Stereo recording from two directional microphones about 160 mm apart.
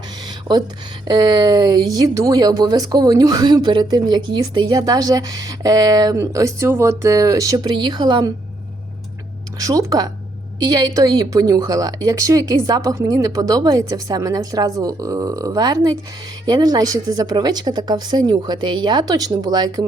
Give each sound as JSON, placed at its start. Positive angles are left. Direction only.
{"t": 1.0, "sound": "speech", "side_deg": -25}
{"t": 9.6, "sound": "speech", "side_deg": -20}